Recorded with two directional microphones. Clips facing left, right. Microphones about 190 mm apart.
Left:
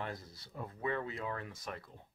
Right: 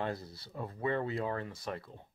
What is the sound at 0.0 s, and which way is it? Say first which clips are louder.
Speech: right 6 dB; 30° right (ahead or behind).